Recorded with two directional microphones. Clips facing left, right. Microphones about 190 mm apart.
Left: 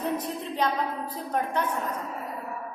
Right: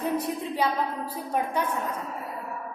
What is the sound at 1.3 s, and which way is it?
Speech, 10° right (ahead or behind).